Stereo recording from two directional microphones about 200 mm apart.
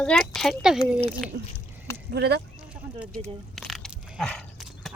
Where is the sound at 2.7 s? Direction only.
5° right (ahead or behind).